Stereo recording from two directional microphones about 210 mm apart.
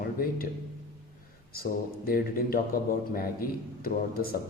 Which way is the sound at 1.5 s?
45° left (ahead or behind).